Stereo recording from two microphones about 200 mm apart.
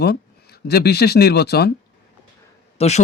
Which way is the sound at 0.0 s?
50° left (ahead or behind).